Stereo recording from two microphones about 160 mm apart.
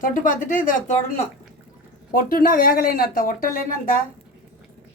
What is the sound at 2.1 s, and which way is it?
A woman's voice, 65° left (ahead or behind).